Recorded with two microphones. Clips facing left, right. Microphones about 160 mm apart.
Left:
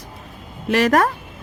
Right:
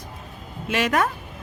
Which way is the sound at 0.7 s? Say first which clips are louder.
Left 6 dB; 40° left (ahead or behind).